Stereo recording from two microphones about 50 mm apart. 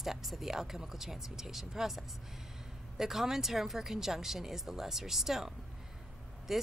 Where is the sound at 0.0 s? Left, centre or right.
Centre.